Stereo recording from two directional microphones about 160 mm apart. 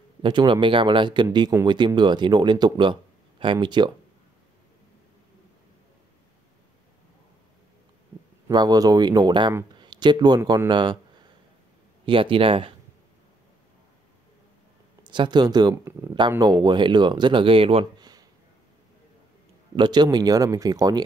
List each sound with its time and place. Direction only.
0.2 s speech: 30° right (ahead or behind)
8.5 s speech: 25° right (ahead or behind)
12.1 s speech: 35° right (ahead or behind)
15.0 s speech: 30° right (ahead or behind)
19.7 s speech: 30° right (ahead or behind)